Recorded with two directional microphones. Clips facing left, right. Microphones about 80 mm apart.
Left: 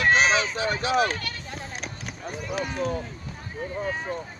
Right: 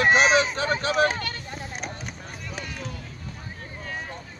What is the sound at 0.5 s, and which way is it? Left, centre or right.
Speech, right.